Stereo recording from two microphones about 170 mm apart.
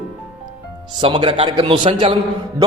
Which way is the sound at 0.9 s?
30° right (ahead or behind).